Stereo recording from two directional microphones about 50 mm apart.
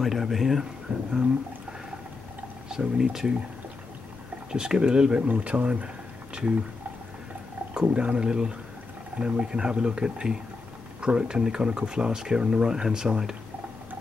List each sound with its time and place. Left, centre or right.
0.0 s speech: centre
0.9 s a sound: right
2.7 s speech: centre
4.5 s speech: centre
7.8 s speech: right